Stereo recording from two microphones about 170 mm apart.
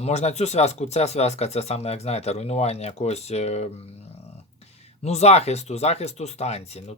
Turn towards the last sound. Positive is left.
turn(degrees=40)  # may be behind; listen again after turning